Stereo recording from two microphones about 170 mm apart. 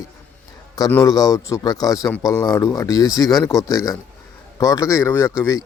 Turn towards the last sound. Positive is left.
turn(degrees=15)  # may be behind; listen again after turning